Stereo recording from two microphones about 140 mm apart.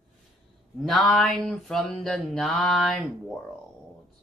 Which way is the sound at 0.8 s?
Centre (ahead or behind).